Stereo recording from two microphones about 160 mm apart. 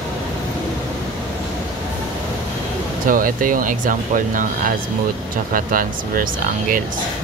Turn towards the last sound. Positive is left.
turn(degrees=-60)  # may be behind; listen again after turning